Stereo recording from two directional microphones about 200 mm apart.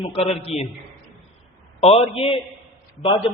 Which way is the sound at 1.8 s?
30° left (ahead or behind).